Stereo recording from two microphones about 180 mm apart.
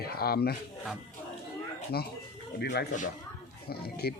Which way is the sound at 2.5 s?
65° left (ahead or behind).